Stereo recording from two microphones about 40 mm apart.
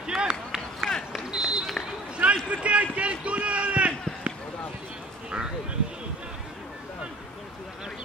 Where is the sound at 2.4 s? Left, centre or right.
Right.